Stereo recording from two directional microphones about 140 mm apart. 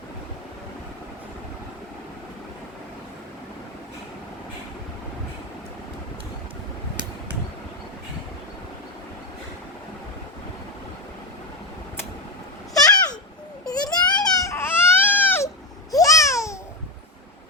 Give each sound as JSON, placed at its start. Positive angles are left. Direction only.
{"t": 12.7, "sound": "a sound", "side_deg": 25}
{"t": 13.7, "sound": "baby cry", "side_deg": 30}
{"t": 15.9, "sound": "babbling", "side_deg": 25}